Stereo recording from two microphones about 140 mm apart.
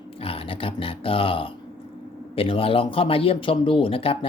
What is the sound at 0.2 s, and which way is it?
Speech, 40° left (ahead or behind).